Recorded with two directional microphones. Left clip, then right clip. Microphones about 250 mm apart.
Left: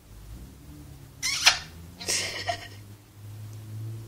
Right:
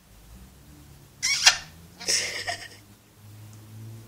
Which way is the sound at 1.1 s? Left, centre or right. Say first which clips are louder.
Right 2 dB; centre.